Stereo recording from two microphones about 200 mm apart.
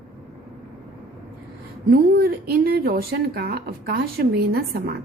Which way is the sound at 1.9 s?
50° right (ahead or behind).